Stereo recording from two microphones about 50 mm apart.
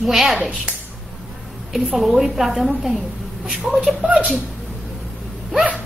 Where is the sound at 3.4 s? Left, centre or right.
Right.